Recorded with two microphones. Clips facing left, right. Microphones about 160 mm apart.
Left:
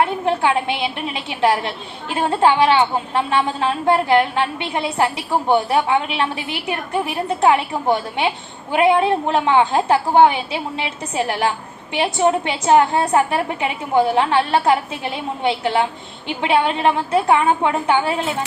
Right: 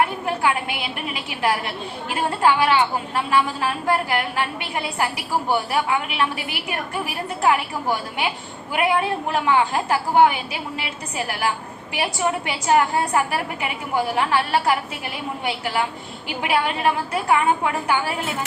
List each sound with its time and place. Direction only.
0.3 s a woman's voice: 25° left (ahead or behind)